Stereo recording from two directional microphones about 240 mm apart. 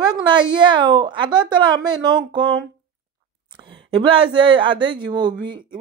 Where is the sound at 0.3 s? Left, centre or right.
Centre.